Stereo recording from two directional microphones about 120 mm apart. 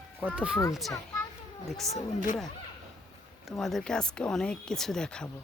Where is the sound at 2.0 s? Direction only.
90° left.